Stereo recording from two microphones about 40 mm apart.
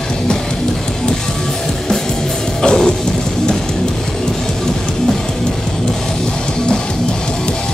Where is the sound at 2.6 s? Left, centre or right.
Centre.